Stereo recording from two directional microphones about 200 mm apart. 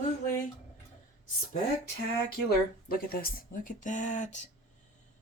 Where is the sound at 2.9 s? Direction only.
45° left (ahead or behind).